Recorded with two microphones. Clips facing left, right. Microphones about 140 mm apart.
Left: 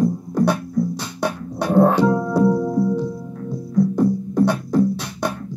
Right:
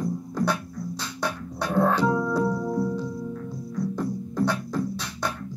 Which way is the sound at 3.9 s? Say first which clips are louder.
Left 10 dB; 20° left (ahead or behind).